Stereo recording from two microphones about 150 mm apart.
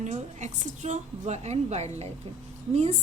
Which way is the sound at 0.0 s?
50° right (ahead or behind).